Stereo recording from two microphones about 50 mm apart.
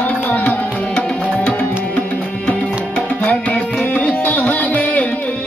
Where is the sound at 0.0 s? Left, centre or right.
Left.